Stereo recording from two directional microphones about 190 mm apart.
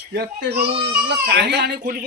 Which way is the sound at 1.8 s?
50° right (ahead or behind).